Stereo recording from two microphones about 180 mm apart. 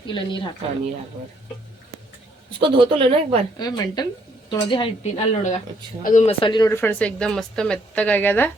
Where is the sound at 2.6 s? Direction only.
30° right (ahead or behind).